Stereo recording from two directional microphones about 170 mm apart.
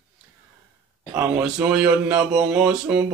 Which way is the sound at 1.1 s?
15° right (ahead or behind).